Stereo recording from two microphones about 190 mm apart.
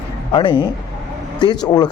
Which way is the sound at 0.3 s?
25° left (ahead or behind).